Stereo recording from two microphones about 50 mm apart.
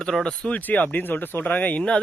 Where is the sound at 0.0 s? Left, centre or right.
Centre.